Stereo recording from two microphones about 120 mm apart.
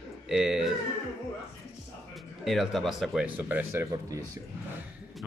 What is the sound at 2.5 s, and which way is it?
Speech, centre (ahead or behind).